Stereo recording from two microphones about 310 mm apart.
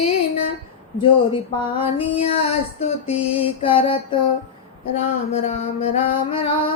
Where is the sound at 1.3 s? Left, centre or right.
Centre.